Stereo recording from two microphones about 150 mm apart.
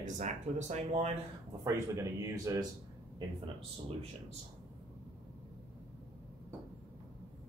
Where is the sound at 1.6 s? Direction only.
20° right (ahead or behind).